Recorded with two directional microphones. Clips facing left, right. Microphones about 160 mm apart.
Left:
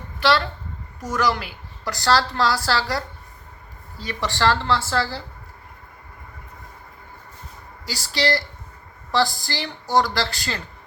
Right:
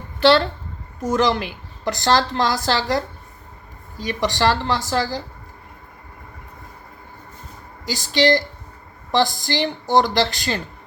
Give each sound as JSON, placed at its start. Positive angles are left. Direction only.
{"t": 0.2, "sound": "a woman's voice", "side_deg": -30}
{"t": 7.9, "sound": "a woman's voice", "side_deg": -20}